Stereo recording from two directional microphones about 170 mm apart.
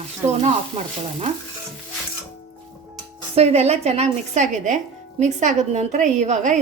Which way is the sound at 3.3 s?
35° right (ahead or behind).